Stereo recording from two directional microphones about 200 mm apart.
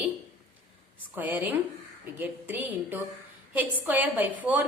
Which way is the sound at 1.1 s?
10° right (ahead or behind).